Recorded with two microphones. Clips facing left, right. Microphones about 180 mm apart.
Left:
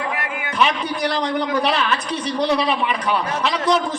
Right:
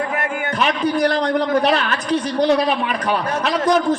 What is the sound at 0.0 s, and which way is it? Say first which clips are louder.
A man's voice: right 4 dB; 45° right (ahead or behind).